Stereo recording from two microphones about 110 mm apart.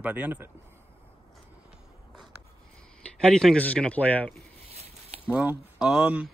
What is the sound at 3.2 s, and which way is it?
Speech, 5° left (ahead or behind).